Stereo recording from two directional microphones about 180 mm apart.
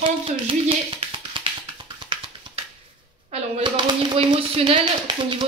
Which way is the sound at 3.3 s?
25° right (ahead or behind).